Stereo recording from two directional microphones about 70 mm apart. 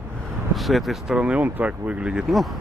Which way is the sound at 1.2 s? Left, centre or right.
Centre.